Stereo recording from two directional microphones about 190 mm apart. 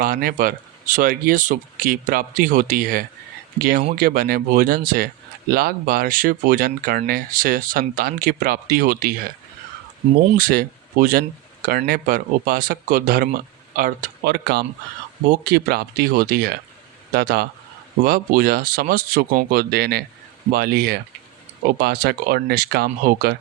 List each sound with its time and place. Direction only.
0.0 s speech: 50° right (ahead or behind)
10.3 s speech: 50° right (ahead or behind)